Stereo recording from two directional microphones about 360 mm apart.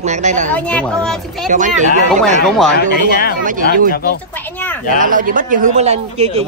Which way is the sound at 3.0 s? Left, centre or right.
Left.